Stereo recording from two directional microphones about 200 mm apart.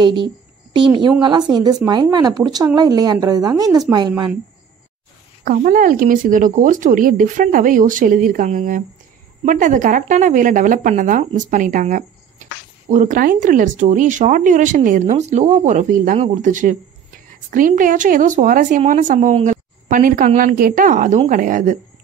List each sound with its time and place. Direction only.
0.0 s speech: 25° right (ahead or behind)
5.4 s a woman's voice: 45° right (ahead or behind)